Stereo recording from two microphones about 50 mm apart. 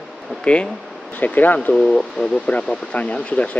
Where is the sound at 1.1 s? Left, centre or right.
Left.